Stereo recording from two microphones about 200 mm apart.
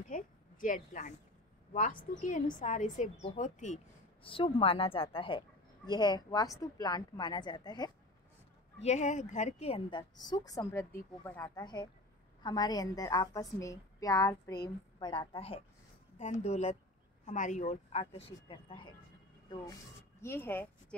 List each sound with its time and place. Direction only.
0.1 s a sound: 40° left (ahead or behind)
1.7 s a woman's voice: 40° left (ahead or behind); by 7.9 s 20° left (ahead or behind)
8.8 s a woman's voice: 35° left (ahead or behind)
20.2 s speech: 10° left (ahead or behind)